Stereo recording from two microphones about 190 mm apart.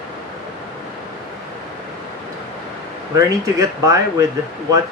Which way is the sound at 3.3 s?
15° right (ahead or behind).